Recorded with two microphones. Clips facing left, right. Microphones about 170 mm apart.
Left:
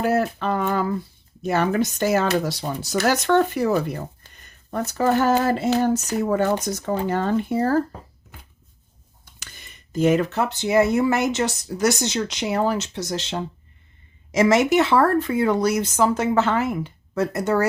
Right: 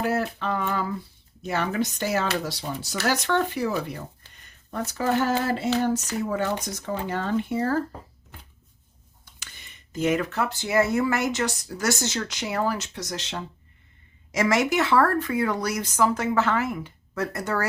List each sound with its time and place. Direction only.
0.0 s speech: 45° left (ahead or behind)
9.9 s speech: 30° left (ahead or behind)